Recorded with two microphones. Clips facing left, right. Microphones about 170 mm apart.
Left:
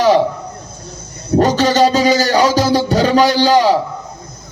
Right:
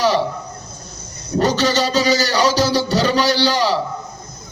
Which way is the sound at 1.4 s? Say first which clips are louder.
Left 5 dB; 50° left (ahead or behind).